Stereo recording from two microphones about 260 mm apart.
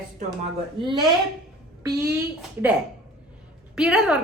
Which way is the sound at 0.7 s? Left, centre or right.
Centre.